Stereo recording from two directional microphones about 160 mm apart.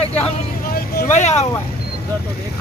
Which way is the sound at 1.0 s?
45° left (ahead or behind).